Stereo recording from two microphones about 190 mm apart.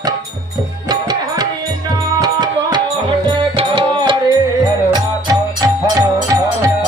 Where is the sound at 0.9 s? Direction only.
20° right (ahead or behind).